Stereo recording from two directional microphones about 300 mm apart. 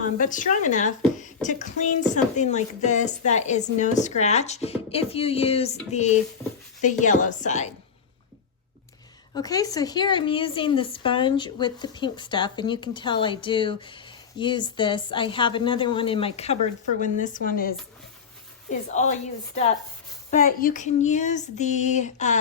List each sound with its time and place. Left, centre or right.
0.2 s a woman's voice: left
9.3 s a woman's voice: centre
20.3 s a woman's voice: left